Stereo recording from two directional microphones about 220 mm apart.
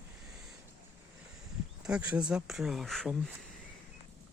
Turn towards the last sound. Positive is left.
turn(degrees=0)  # may be behind; listen again after turning